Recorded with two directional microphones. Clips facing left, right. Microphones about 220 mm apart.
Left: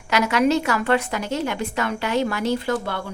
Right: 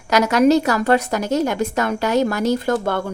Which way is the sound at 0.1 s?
40° right (ahead or behind).